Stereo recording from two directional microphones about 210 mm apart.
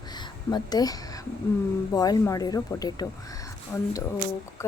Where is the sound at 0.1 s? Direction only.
20° left (ahead or behind).